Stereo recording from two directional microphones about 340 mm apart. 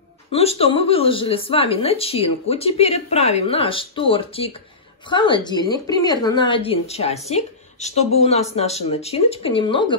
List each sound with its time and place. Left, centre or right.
0.3 s a woman's voice: centre